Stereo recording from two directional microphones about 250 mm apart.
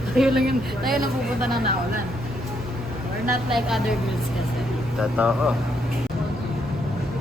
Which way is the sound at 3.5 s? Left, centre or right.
Centre.